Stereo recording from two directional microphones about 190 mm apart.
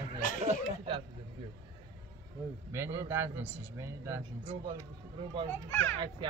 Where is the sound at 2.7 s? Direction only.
15° right (ahead or behind).